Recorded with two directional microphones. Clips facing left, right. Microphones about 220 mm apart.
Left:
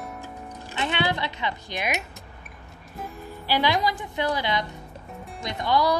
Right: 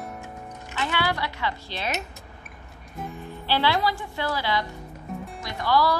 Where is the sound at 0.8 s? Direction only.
20° left (ahead or behind).